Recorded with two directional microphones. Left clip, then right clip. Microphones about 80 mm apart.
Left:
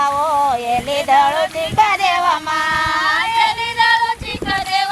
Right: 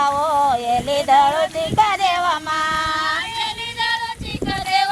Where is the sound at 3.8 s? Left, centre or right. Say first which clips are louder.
Left 8 dB; left.